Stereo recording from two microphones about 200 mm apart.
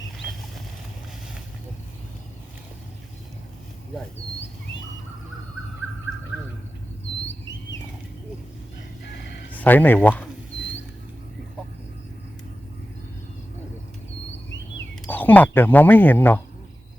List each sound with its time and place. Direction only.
9.0 s fowl: 60° left (ahead or behind)
9.5 s speech: 10° left (ahead or behind)
15.0 s speech: 10° left (ahead or behind)